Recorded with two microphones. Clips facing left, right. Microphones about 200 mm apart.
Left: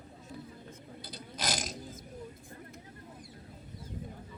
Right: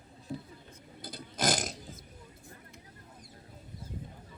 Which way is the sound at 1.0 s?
50° right (ahead or behind).